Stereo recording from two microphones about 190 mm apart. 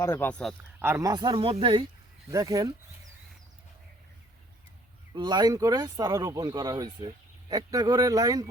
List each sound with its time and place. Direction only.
0.0 s speech: 10° left (ahead or behind)
0.8 s speech: 15° right (ahead or behind)
5.1 s speech: 25° right (ahead or behind)